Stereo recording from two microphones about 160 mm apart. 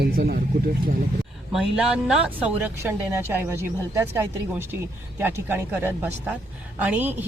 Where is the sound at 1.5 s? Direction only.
5° right (ahead or behind).